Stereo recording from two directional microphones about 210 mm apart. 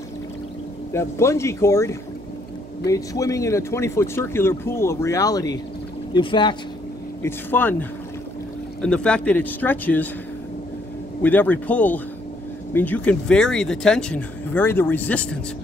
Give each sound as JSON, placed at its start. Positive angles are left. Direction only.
{"t": 0.9, "sound": "speech", "side_deg": 15}
{"t": 7.2, "sound": "speech", "side_deg": 10}
{"t": 8.8, "sound": "speech", "side_deg": 5}
{"t": 11.2, "sound": "speech", "side_deg": 10}